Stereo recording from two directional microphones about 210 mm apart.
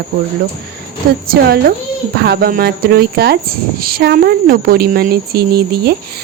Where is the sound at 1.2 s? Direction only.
45° right (ahead or behind).